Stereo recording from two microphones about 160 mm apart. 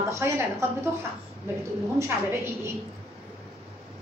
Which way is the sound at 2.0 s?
15° right (ahead or behind).